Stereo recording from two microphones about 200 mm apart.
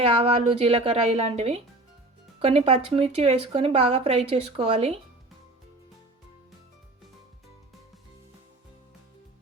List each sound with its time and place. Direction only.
0.0 s speech: 30° right (ahead or behind)